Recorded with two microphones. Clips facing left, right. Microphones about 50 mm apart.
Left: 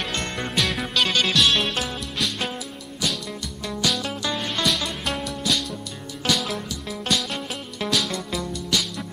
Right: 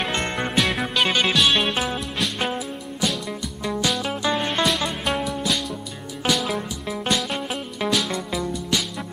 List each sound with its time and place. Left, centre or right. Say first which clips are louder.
0.0 s music: right 4 dB; right
0.6 s music: right 1 dB; centre
1.0 s music: right 1 dB; centre
3.6 s music: right 2 dB; centre
5.0 s music: right 2 dB; centre
6.9 s music: right 2 dB; right
7.2 s music: right 3 dB; centre